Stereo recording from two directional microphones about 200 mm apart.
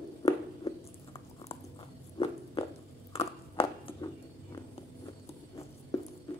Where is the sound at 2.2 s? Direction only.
25° left (ahead or behind).